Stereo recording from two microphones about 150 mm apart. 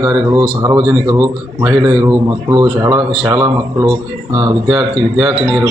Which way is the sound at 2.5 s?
25° right (ahead or behind).